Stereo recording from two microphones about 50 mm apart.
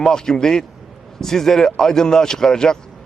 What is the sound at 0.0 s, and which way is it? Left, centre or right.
A man's voice, centre.